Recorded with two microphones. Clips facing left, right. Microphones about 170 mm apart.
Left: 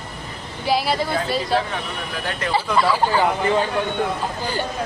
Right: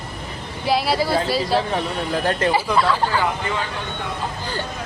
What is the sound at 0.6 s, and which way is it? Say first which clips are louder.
Speech: right 1 dB; centre (ahead or behind).